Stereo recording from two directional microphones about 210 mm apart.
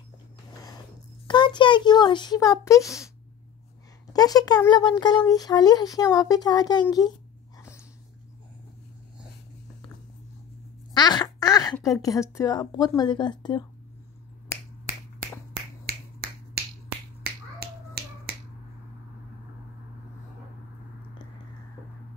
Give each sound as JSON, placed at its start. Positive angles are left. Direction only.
{"t": 1.2, "sound": "speech", "side_deg": 20}
{"t": 4.1, "sound": "speech", "side_deg": 15}
{"t": 10.9, "sound": "quack", "side_deg": 20}
{"t": 11.7, "sound": "speech", "side_deg": 15}
{"t": 15.8, "sound": "finger snapping", "side_deg": -45}